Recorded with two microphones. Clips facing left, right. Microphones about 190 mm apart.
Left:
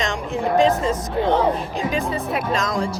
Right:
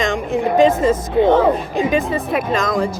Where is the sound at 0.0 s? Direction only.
55° right (ahead or behind).